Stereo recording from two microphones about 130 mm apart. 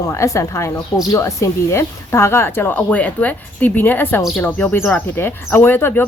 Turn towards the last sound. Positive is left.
turn(degrees=15)  # may be behind; listen again after turning